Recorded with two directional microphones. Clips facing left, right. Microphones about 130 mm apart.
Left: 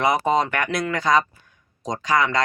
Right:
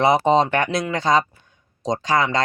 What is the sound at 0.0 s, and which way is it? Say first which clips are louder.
Speech: right 4 dB; 25° right (ahead or behind).